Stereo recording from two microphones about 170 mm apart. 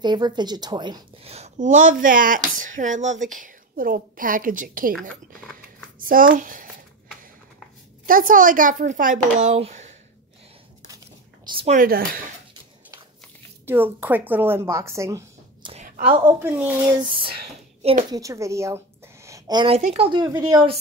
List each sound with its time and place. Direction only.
0.0 s a woman's voice: 25° right (ahead or behind)
1.3 s speech: 45° right (ahead or behind)
5.9 s a child's voice: 55° right (ahead or behind)
8.1 s speech: 55° right (ahead or behind)
11.4 s speech: 30° right (ahead or behind)
11.7 s speech: 60° right (ahead or behind)
13.7 s a woman's voice: 10° right (ahead or behind)
15.6 s a sound: 35° right (ahead or behind)
16.3 s a woman's voice: 15° right (ahead or behind)
17.1 s speech: 30° right (ahead or behind)
18.1 s a woman's voice: 20° right (ahead or behind)
19.2 s a sound: 20° right (ahead or behind)
19.8 s a woman's voice: 35° right (ahead or behind)